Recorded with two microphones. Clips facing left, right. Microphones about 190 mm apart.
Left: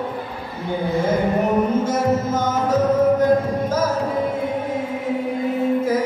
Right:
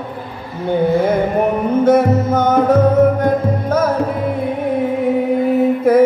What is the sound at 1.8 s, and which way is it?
Music, 60° right (ahead or behind).